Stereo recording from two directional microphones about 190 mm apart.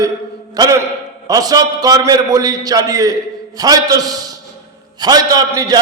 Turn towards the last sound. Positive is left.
turn(degrees=-20)  # may be behind; listen again after turning